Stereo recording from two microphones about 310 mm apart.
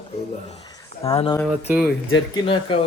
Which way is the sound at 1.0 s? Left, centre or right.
Centre.